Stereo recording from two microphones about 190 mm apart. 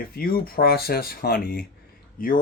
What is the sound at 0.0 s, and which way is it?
Speech, 50° left (ahead or behind).